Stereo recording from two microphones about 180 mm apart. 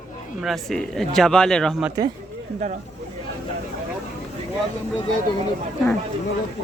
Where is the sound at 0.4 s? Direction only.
Centre (ahead or behind).